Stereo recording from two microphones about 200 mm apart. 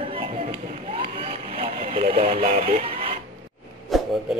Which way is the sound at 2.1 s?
30° right (ahead or behind).